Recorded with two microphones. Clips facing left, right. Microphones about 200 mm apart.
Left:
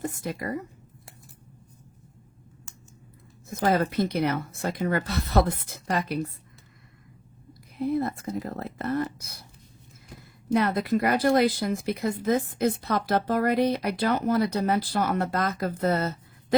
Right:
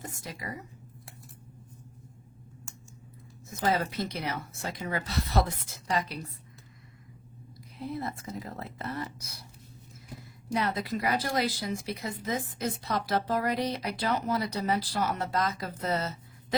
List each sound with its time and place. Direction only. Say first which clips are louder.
0.2 s speech: left 9 dB; 55° left (ahead or behind)
3.5 s speech: left 5 dB; 60° left (ahead or behind)
7.8 s speech: left 9 dB; 55° left (ahead or behind)
10.5 s speech: left 7 dB; 55° left (ahead or behind)